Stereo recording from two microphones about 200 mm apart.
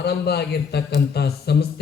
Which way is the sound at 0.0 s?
55° left (ahead or behind).